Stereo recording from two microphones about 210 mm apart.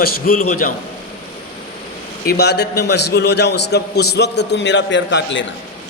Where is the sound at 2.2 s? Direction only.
50° left (ahead or behind).